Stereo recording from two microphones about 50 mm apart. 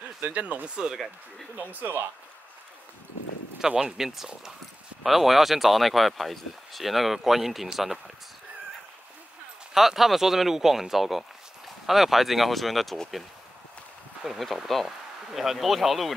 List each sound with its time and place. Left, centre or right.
0.3 s speech: right
0.7 s speech: centre
1.6 s speech: right
3.6 s speech: centre
9.8 s speech: centre
14.2 s speech: centre